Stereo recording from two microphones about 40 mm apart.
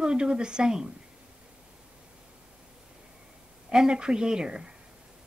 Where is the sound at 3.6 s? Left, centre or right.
Centre.